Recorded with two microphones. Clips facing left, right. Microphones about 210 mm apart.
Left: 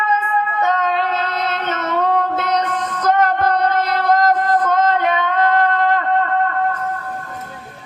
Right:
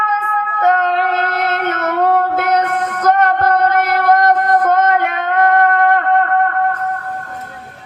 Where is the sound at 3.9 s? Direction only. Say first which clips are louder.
Right 2 dB; 60° right (ahead or behind).